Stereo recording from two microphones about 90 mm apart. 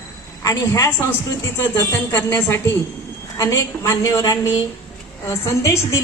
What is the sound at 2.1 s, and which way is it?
A woman's voice, 30° left (ahead or behind).